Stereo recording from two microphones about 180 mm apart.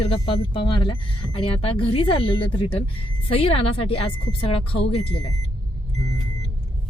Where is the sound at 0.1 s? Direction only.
30° left (ahead or behind).